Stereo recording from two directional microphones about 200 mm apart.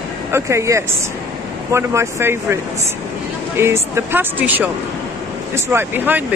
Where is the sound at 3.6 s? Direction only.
10° right (ahead or behind).